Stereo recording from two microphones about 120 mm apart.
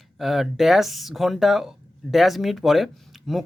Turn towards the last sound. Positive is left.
turn(degrees=0)  # may be behind; listen again after turning